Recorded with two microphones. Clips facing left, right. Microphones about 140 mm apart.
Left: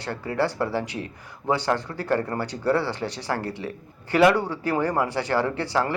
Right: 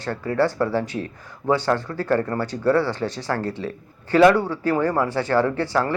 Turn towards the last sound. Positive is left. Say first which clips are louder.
# right 3 dB
turn(degrees=15)  # may be behind; listen again after turning